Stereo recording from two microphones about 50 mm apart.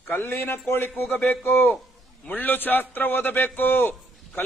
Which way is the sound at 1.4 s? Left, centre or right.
Left.